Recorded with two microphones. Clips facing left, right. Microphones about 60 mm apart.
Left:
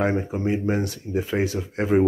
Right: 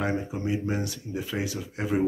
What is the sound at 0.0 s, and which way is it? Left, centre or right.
Speech, left.